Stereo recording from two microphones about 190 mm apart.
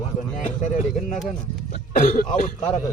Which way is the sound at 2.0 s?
45° left (ahead or behind).